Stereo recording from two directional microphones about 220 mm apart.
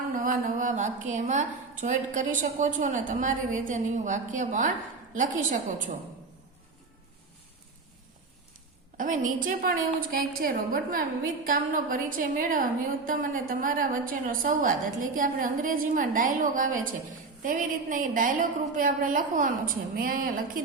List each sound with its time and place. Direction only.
0.1 s a woman's voice: 35° right (ahead or behind)
9.0 s a woman's voice: 35° right (ahead or behind)